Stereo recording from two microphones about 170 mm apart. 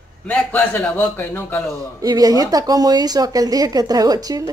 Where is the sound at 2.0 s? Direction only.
20° right (ahead or behind).